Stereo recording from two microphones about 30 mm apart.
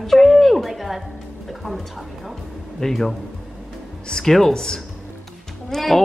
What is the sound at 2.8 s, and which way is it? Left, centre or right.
Speech, centre.